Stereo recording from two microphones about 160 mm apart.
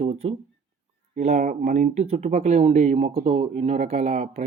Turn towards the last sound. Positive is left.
turn(degrees=-40)  # may be behind; listen again after turning